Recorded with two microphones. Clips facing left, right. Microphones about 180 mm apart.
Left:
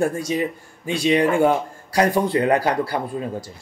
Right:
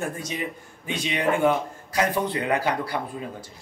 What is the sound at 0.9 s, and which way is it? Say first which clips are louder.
A man's voice: left 7 dB; 35° left (ahead or behind).